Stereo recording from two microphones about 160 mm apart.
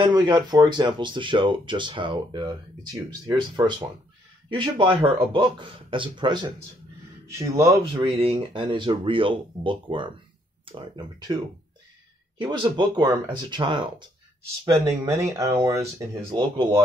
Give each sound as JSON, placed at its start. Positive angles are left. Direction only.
{"t": 0.0, "sound": "speech", "side_deg": -25}
{"t": 7.8, "sound": "speech", "side_deg": -30}